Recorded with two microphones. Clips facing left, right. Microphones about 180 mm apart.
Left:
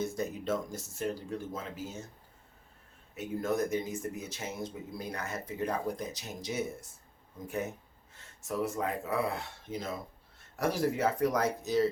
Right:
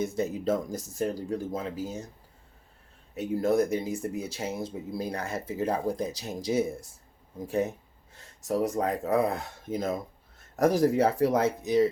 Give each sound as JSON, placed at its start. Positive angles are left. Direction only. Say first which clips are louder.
{"t": 0.2, "sound": "speech", "louder": "right 5 dB", "side_deg": -35}
{"t": 3.2, "sound": "speech", "louder": "right 7 dB", "side_deg": -35}